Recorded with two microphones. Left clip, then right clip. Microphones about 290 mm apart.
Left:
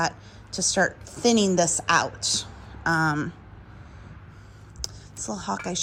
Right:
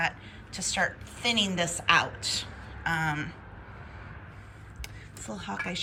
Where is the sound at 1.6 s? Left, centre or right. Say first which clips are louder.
Left 2 dB; left.